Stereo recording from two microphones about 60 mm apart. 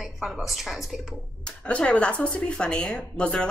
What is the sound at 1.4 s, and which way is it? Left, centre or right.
Speech, centre.